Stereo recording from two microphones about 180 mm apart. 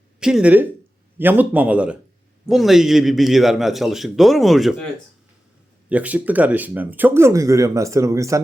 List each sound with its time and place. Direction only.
0.2 s a man's voice: 5° right (ahead or behind)
5.9 s speech: 10° right (ahead or behind)